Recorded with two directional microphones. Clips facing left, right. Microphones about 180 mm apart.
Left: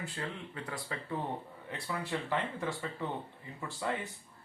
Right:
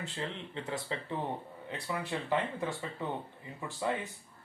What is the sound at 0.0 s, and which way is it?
Speech, 25° right (ahead or behind).